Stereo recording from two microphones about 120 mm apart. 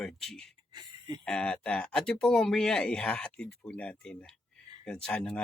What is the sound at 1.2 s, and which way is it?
Speech, 5° left (ahead or behind).